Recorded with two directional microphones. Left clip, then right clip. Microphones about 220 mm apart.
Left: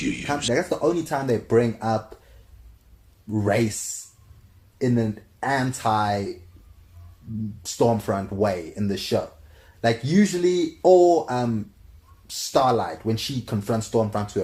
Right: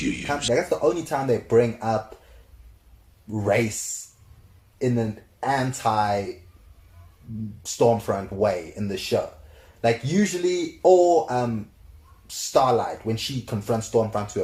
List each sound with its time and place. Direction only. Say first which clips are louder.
0.0 s a sound: even; centre (ahead or behind)
0.5 s speech: right 1 dB; 40° left (ahead or behind)
3.3 s speech: even; 40° left (ahead or behind)
4.8 s speech: left 1 dB; 40° left (ahead or behind)
7.6 s speech: right 2 dB; 40° left (ahead or behind)